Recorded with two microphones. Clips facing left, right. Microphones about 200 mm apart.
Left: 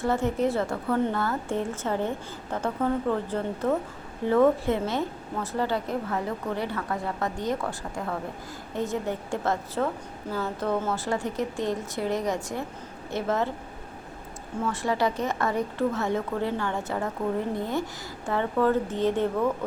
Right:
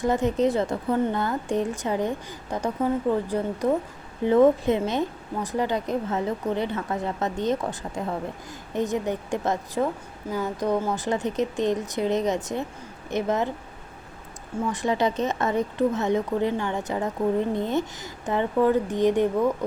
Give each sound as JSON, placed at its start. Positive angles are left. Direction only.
{"t": 0.0, "sound": "a woman's voice", "side_deg": -15}
{"t": 14.7, "sound": "a woman's voice", "side_deg": -20}